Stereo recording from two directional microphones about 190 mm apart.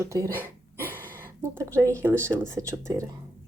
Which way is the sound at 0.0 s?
15° right (ahead or behind).